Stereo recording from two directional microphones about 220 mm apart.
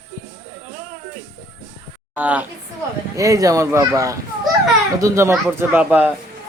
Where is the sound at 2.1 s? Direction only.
5° right (ahead or behind).